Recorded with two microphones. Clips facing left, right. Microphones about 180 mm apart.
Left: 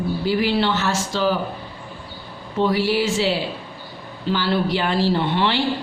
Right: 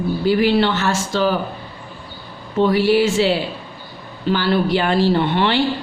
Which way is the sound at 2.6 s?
55° right (ahead or behind).